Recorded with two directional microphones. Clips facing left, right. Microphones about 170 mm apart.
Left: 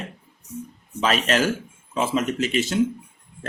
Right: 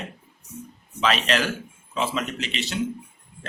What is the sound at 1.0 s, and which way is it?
Speech, 45° left (ahead or behind).